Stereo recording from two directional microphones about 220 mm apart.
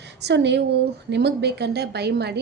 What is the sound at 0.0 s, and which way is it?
A woman's voice, 50° right (ahead or behind).